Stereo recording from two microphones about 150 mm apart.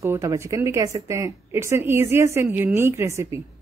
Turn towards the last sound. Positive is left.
turn(degrees=-20)  # may be behind; listen again after turning